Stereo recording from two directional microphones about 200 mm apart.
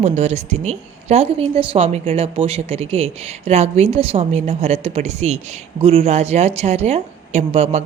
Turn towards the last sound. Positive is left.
turn(degrees=-35)  # may be behind; listen again after turning